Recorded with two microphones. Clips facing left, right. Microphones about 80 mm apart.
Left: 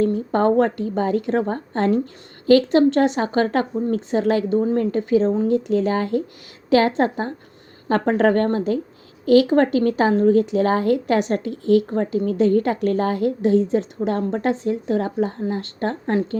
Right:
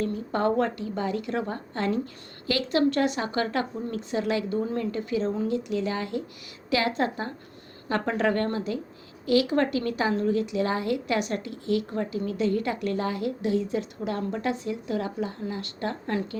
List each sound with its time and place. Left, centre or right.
0.0 s a woman's voice: left